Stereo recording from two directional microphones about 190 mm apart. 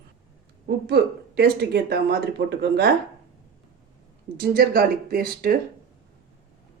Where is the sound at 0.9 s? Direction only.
55° right (ahead or behind).